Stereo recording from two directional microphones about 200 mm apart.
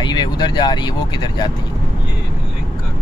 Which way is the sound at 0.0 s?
20° left (ahead or behind).